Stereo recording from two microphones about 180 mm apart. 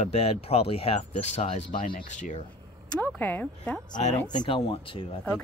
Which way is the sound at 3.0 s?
10° left (ahead or behind).